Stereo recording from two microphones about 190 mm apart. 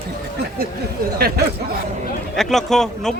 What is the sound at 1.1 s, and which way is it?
Speech, 55° right (ahead or behind).